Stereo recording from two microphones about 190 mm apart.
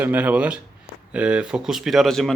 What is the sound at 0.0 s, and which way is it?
Speech, 10° right (ahead or behind).